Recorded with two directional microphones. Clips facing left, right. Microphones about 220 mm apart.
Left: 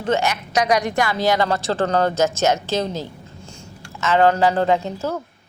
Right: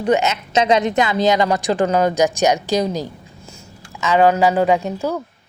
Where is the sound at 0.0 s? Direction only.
20° right (ahead or behind).